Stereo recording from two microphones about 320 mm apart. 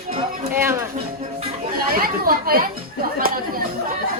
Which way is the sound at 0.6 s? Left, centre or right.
Centre.